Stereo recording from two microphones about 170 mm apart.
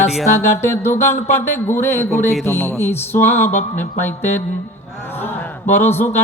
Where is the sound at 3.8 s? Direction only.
10° left (ahead or behind).